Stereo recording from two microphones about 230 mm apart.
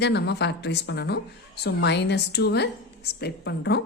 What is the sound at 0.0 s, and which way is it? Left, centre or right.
A woman's voice, left.